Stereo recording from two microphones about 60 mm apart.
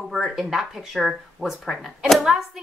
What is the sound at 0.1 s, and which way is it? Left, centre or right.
Speech, centre.